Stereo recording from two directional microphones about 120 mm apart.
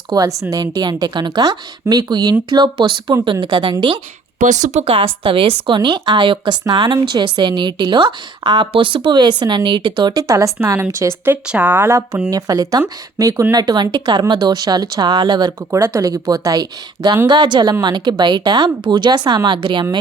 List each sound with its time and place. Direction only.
0.1 s speech: 30° right (ahead or behind)
4.4 s speech: 85° right
4.9 s speech: 45° right (ahead or behind); by 12.2 s 20° right (ahead or behind)
12.3 s speech: 30° right (ahead or behind)
15.7 s speech: 25° right (ahead or behind)